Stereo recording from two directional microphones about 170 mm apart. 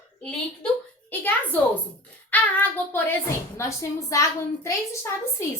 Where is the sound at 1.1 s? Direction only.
10° left (ahead or behind).